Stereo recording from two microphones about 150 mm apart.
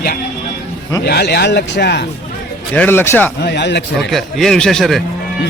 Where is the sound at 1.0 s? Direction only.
90° left.